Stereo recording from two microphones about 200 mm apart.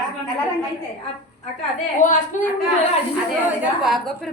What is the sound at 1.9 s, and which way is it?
Speech, 40° left (ahead or behind).